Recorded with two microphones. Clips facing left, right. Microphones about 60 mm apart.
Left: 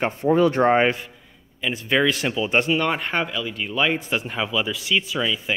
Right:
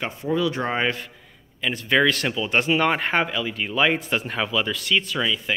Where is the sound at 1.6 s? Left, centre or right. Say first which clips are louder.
Right 1 dB; centre.